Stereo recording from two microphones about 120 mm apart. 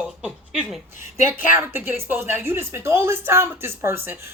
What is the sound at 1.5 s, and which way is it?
A woman's voice, 20° right (ahead or behind).